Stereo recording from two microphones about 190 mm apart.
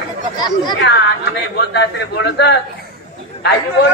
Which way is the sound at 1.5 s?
60° left (ahead or behind).